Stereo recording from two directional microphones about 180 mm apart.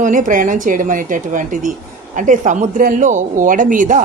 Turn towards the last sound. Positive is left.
turn(degrees=-45)  # may be behind; listen again after turning